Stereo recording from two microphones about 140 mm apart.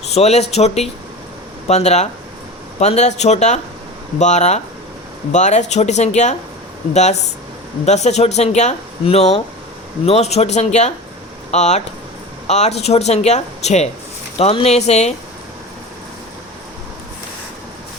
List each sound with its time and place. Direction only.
0.1 s speech: 50° left (ahead or behind)